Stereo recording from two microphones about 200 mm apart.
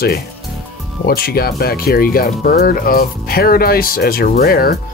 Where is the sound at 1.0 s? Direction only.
50° left (ahead or behind).